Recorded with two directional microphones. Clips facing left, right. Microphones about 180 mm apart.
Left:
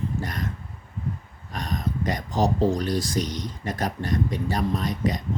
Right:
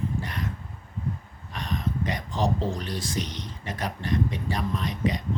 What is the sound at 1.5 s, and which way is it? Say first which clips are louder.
Speech: left 1 dB; 40° left (ahead or behind).